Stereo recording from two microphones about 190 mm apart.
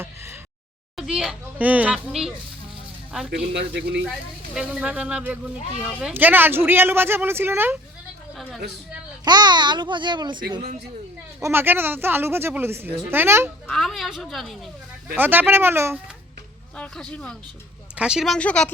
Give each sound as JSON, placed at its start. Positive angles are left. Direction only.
{"t": 0.9, "sound": "speech", "side_deg": -5}
{"t": 3.5, "sound": "a man's voice", "side_deg": -65}
{"t": 4.5, "sound": "speech", "side_deg": -5}
{"t": 9.2, "sound": "a child's voice", "side_deg": -20}
{"t": 11.3, "sound": "speech", "side_deg": -15}
{"t": 13.7, "sound": "speech", "side_deg": 0}
{"t": 16.7, "sound": "speech", "side_deg": 5}